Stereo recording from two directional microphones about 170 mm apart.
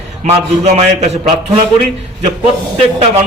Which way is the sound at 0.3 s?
40° right (ahead or behind).